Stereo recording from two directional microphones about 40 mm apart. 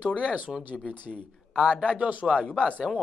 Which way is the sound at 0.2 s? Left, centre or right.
Right.